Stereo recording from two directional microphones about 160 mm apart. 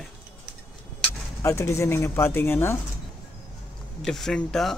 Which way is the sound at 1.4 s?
15° left (ahead or behind).